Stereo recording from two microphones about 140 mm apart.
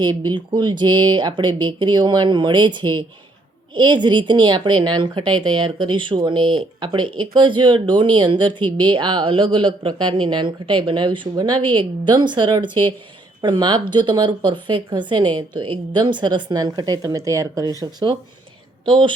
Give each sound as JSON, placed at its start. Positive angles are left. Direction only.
{"t": 0.0, "sound": "speech", "side_deg": -30}